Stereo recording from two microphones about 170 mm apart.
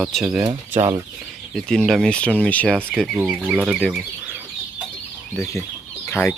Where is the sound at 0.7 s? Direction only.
15° right (ahead or behind).